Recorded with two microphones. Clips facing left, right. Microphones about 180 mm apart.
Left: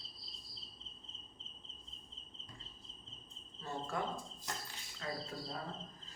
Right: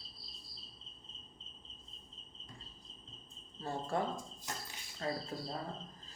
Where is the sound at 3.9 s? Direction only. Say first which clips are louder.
Right 5 dB; 30° right (ahead or behind).